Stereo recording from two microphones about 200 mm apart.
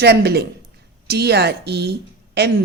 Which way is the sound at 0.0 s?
55° right (ahead or behind).